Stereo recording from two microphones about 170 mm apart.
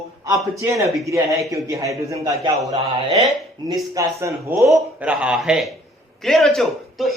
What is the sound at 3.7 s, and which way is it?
Speech, 20° right (ahead or behind).